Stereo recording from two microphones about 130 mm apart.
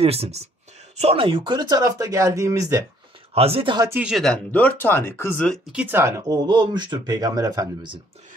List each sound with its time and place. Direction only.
0.0 s speech: 50° right (ahead or behind); by 2.9 s 25° right (ahead or behind)
3.3 s speech: 50° right (ahead or behind)
3.9 s speech: 10° right (ahead or behind)
4.5 s speech: 15° left (ahead or behind)
5.7 s speech: 10° right (ahead or behind); by 8.0 s 35° right (ahead or behind)